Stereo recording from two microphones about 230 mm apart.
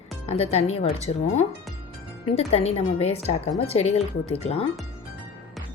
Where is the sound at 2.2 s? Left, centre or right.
Left.